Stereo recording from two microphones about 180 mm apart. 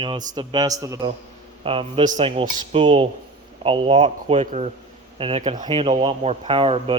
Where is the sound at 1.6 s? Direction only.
30° right (ahead or behind).